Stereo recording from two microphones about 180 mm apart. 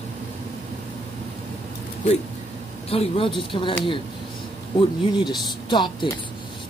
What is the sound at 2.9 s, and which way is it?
A woman's voice, 30° left (ahead or behind).